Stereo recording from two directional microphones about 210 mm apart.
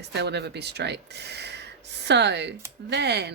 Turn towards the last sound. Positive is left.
turn(degrees=-55)  # may be behind; listen again after turning